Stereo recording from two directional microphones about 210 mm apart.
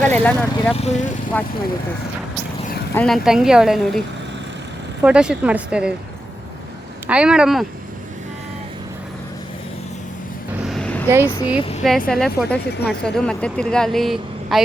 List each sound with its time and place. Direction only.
0.0 s speech: 5° left (ahead or behind)
0.8 s speech: 35° left (ahead or behind)
1.3 s speech: 5° left (ahead or behind)
2.9 s speech: 5° left (ahead or behind)
5.0 s speech: 5° right (ahead or behind)
7.1 s speech: 5° right (ahead or behind)
10.7 s a sound: 5° left (ahead or behind)
11.1 s speech: 10° right (ahead or behind)
12.0 s speech: centre (ahead or behind)